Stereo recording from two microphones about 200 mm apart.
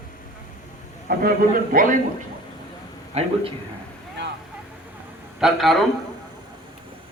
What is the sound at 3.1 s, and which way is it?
Speech, 30° right (ahead or behind).